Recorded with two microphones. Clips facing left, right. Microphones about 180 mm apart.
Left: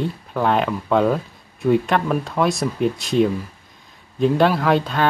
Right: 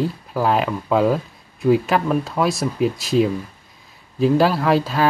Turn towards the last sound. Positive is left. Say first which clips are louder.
# right 1 dB
turn(degrees=-5)  # may be behind; listen again after turning